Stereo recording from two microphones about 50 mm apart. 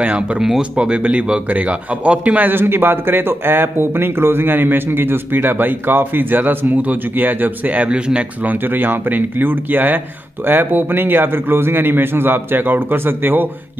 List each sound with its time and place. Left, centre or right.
0.0 s a man's voice: right
2.5 s speech: right